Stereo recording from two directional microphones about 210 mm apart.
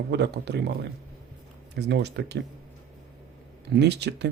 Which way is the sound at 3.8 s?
55° right (ahead or behind).